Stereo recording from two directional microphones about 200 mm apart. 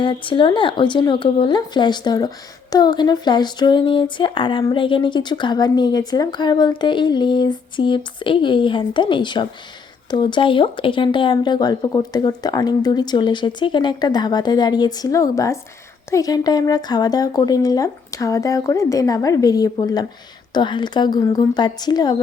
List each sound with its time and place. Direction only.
0.0 s speech: 25° left (ahead or behind)